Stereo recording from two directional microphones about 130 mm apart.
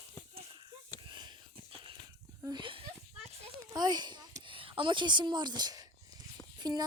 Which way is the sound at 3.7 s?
30° right (ahead or behind).